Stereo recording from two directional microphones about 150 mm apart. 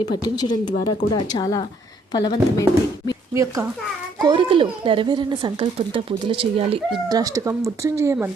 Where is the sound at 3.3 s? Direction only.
20° right (ahead or behind).